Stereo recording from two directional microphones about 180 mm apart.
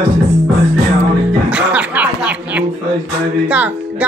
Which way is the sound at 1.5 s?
5° right (ahead or behind).